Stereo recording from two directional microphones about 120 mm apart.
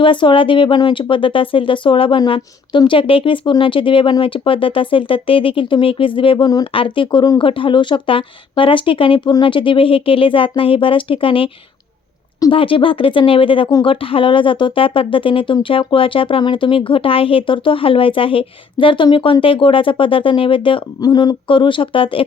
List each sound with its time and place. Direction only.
0.0 s speech: 45° left (ahead or behind)
21.0 s speech: 35° left (ahead or behind)